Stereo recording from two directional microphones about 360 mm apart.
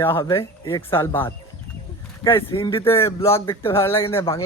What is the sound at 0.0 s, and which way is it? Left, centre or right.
Speech, centre.